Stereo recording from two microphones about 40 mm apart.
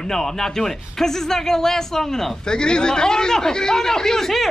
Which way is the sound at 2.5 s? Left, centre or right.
Left.